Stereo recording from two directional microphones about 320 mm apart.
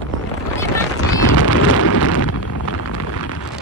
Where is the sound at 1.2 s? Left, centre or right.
Left.